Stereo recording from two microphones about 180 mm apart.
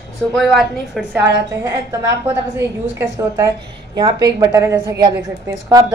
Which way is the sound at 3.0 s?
15° right (ahead or behind).